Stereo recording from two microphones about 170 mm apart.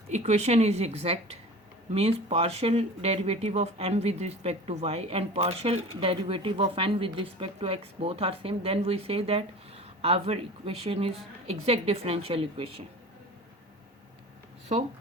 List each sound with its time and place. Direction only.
0.1 s speech: 40° right (ahead or behind)